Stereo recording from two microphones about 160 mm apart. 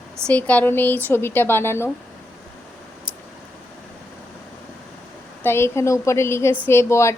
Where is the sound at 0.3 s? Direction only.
10° left (ahead or behind).